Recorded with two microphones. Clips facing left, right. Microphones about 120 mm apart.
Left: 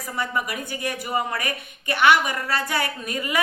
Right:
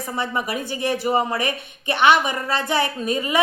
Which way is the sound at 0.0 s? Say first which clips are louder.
Right 2 dB; 25° right (ahead or behind).